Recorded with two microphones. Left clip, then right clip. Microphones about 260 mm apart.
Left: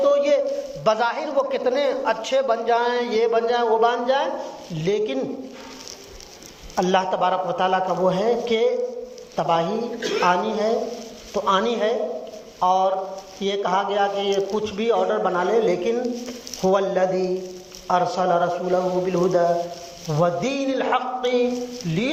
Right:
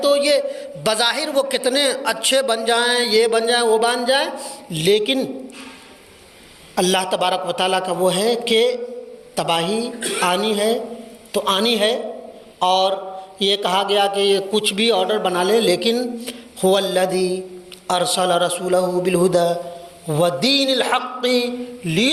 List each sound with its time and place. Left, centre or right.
0.0 s a sound: right
0.9 s a man's voice: right
6.7 s a man's voice: right